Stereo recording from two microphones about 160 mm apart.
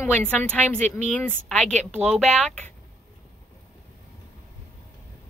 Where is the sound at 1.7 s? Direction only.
45° right (ahead or behind).